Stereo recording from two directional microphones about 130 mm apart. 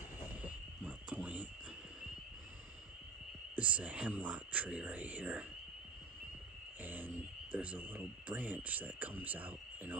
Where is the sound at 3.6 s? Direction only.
10° right (ahead or behind).